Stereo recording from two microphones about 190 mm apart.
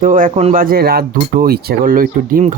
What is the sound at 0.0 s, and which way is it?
Speech, 45° right (ahead or behind).